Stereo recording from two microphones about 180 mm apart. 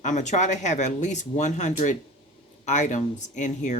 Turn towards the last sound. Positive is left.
turn(degrees=40)  # may be behind; listen again after turning